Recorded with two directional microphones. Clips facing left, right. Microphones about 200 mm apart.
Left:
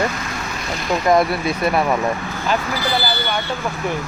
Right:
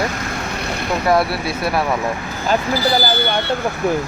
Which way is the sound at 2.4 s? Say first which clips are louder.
Right 4 dB; 30° right (ahead or behind).